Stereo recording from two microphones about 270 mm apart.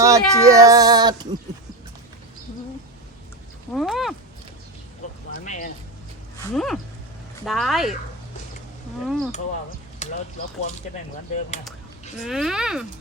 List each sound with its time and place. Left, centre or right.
0.0 s speech: centre
3.7 s speech: centre
5.5 s speech: left
6.5 s speech: centre
9.0 s speech: centre
9.3 s speech: left
12.2 s speech: centre